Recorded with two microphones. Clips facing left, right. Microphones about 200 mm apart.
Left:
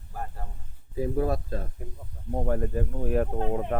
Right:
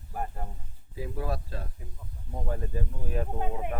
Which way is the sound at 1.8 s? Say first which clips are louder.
Left 6 dB; 55° left (ahead or behind).